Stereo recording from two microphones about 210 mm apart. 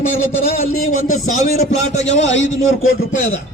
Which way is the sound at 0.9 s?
35° left (ahead or behind).